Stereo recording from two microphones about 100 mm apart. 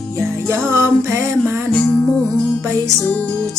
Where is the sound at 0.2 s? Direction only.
25° right (ahead or behind).